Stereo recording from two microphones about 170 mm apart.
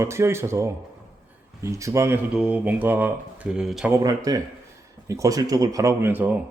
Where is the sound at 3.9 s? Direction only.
20° right (ahead or behind).